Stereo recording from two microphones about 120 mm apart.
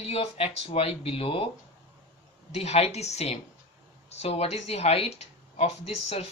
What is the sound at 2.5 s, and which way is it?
Speech, 65° left (ahead or behind).